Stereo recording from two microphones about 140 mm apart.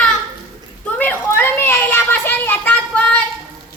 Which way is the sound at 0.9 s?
15° left (ahead or behind).